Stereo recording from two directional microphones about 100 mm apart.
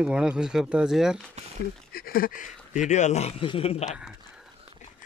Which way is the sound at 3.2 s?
70° left (ahead or behind).